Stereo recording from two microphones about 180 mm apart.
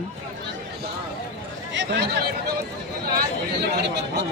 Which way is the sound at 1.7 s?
75° right (ahead or behind).